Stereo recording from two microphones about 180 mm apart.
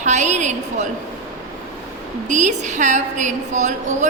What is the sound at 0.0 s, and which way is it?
Speech, 40° right (ahead or behind).